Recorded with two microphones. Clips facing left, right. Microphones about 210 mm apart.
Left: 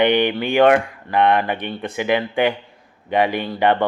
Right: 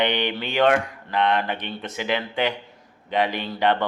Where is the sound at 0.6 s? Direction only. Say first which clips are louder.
Left 4 dB; 55° left (ahead or behind).